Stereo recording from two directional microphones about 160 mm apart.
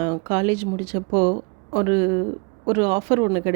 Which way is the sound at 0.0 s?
30° right (ahead or behind).